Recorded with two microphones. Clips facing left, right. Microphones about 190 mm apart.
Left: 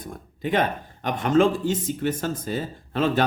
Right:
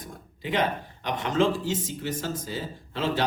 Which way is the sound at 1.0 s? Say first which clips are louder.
Left 5 dB; 50° left (ahead or behind).